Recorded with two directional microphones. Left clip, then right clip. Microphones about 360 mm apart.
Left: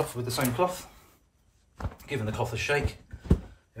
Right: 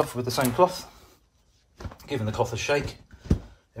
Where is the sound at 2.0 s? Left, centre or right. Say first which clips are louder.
Right 5 dB; centre.